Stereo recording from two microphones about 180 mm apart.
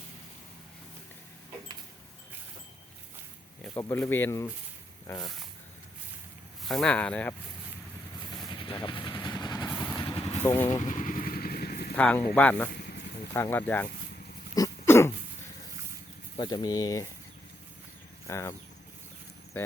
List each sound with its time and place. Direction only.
3.6 s speech: 10° left (ahead or behind)
6.7 s speech: 5° left (ahead or behind)
8.4 s vehicle: 30° left (ahead or behind)
10.8 s vehicle: 45° left (ahead or behind)
11.9 s speech: 10° left (ahead or behind)
14.5 s throat clearing: 15° left (ahead or behind)
16.4 s speech: 25° left (ahead or behind)
18.3 s speech: 15° left (ahead or behind)